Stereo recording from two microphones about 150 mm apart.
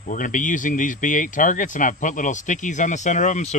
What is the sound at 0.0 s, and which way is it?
Speech, 60° left (ahead or behind).